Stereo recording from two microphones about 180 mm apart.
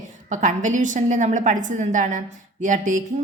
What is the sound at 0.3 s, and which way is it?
A woman's voice, 45° right (ahead or behind).